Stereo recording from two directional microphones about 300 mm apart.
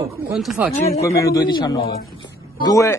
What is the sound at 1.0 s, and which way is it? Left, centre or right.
Speech, centre.